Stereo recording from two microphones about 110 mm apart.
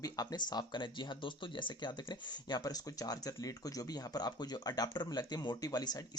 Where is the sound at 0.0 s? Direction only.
35° left (ahead or behind).